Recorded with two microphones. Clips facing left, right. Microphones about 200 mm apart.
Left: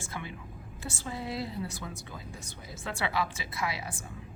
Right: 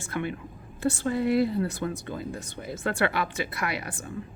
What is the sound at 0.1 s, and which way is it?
Speech, 60° right (ahead or behind).